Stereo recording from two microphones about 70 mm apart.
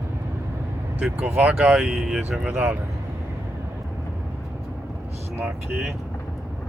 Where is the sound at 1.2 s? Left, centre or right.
Centre.